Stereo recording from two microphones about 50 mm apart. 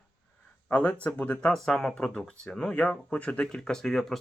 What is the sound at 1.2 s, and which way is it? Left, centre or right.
Speech, left.